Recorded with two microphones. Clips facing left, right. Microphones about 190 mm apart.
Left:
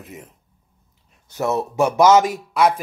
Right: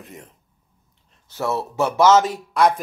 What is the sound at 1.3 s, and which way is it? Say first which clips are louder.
Speech: left 3 dB; 20° left (ahead or behind).